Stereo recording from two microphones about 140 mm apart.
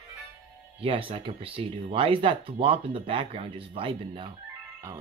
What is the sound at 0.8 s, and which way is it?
Speech, 40° right (ahead or behind).